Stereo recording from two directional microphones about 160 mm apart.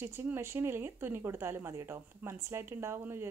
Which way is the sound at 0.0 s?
15° right (ahead or behind).